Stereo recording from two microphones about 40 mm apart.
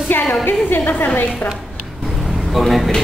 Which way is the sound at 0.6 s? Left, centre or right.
Left.